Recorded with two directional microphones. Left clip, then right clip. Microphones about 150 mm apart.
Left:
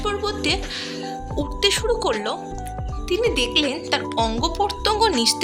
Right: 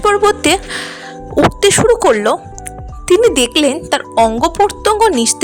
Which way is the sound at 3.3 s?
55° right (ahead or behind).